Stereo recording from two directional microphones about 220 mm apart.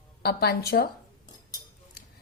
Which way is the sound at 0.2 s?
45° left (ahead or behind).